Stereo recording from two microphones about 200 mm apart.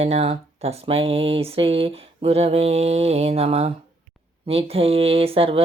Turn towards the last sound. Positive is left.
turn(degrees=-25)  # may be behind; listen again after turning